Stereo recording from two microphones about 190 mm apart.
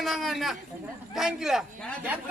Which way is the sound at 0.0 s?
Centre (ahead or behind).